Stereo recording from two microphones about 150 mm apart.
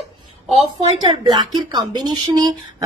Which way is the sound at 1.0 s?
30° right (ahead or behind).